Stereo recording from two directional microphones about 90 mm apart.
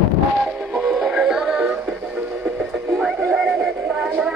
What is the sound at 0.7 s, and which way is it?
Synthetic singing, 10° right (ahead or behind).